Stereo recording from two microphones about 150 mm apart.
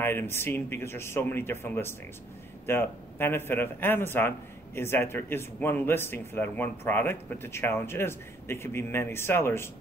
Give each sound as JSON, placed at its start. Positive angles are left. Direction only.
{"t": 0.0, "sound": "speech", "side_deg": 15}